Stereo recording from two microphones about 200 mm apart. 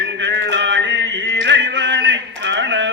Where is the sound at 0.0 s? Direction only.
60° right (ahead or behind).